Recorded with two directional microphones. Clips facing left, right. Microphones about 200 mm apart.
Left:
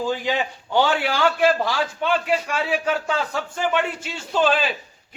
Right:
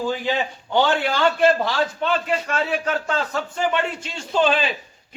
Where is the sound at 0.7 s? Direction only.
10° left (ahead or behind).